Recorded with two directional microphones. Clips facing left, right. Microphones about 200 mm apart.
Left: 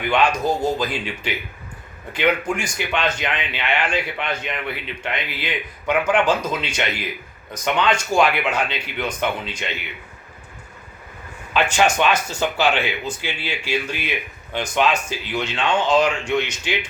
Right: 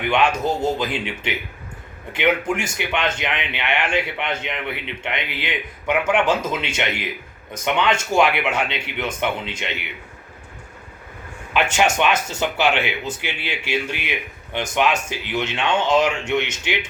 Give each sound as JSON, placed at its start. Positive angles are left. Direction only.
{"t": 0.0, "sound": "speech", "side_deg": -25}
{"t": 11.6, "sound": "speech", "side_deg": -20}